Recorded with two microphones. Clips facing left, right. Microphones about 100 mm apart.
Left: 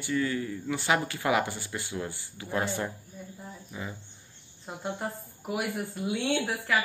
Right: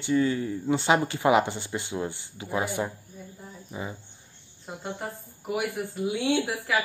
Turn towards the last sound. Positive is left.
turn(degrees=0)  # may be behind; listen again after turning